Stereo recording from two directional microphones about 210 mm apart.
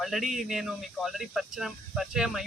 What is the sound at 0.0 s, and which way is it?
Speech, centre (ahead or behind).